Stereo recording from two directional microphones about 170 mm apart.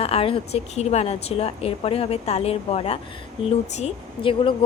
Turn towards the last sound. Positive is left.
turn(degrees=35)  # may be behind; listen again after turning